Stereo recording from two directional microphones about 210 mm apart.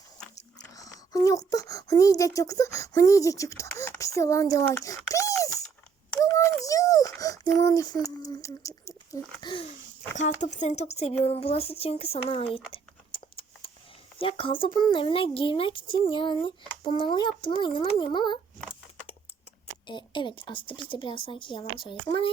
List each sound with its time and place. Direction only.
0.3 s chewing: 15° left (ahead or behind)
1.5 s speech: 15° left (ahead or behind)
10.2 s speech: 35° left (ahead or behind)
12.7 s a sound: 25° left (ahead or behind)
14.2 s speech: 25° left (ahead or behind)
19.9 s speech: 20° left (ahead or behind)